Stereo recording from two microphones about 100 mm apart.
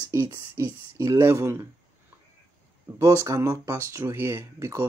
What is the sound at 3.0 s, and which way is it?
Speech, 35° right (ahead or behind).